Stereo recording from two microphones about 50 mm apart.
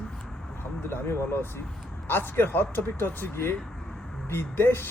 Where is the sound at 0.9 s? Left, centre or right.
Left.